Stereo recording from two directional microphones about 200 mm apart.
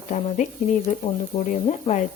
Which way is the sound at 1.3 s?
20° left (ahead or behind).